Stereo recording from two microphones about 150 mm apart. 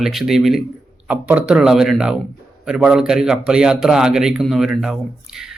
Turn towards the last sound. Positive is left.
turn(degrees=-5)  # may be behind; listen again after turning